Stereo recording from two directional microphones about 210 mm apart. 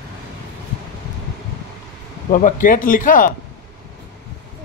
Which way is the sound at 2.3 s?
40° left (ahead or behind).